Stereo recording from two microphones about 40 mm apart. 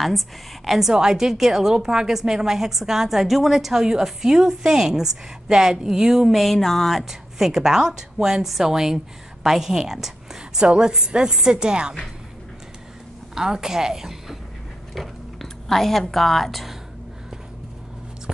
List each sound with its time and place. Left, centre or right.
0.7 s a woman's voice: centre
6.3 s a sound: centre
7.0 s a woman's voice: centre
13.3 s a woman's voice: centre
15.0 s speech: centre